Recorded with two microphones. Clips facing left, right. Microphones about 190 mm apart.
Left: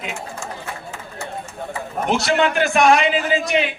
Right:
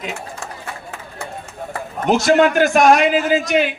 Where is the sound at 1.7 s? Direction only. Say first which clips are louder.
Right 4 dB; 45° right (ahead or behind).